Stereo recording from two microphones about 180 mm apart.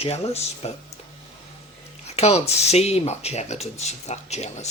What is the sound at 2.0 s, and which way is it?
Speech, 35° left (ahead or behind).